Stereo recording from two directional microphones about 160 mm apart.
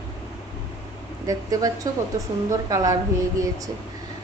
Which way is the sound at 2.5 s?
20° right (ahead or behind).